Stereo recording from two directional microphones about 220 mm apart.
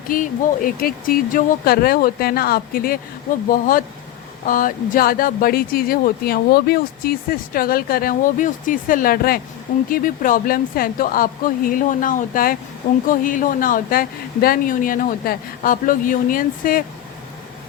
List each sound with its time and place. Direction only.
0.1 s speech: 40° left (ahead or behind)